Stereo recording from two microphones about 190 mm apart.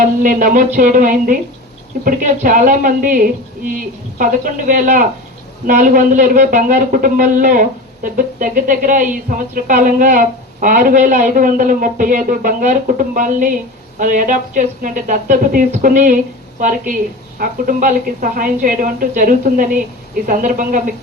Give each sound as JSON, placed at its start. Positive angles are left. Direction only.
{"t": 0.0, "sound": "a man's voice", "side_deg": -45}